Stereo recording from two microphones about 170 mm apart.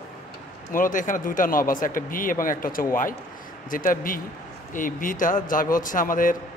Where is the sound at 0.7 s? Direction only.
50° left (ahead or behind).